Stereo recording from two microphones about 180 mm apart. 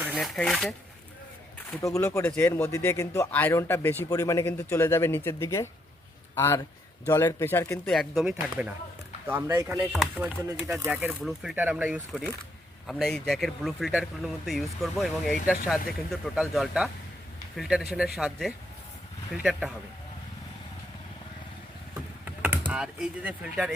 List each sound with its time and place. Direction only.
0.0 s shuffling cards: 10° right (ahead or behind)
0.3 s speech: centre (ahead or behind)
1.8 s speech: 15° left (ahead or behind)
7.9 s speech: centre (ahead or behind)
22.2 s speech: 10° right (ahead or behind)